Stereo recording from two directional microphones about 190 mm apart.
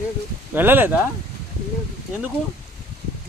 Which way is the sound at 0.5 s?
10° right (ahead or behind).